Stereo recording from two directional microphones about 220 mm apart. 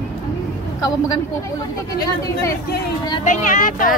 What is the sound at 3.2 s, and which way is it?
Speech, 35° left (ahead or behind).